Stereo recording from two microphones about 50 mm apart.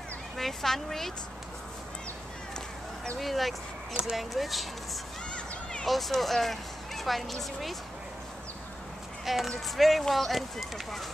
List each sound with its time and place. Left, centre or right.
0.4 s a woman's voice: centre
3.2 s a woman's voice: centre
5.3 s a sound: centre
5.9 s a woman's voice: centre
9.2 s a woman's voice: centre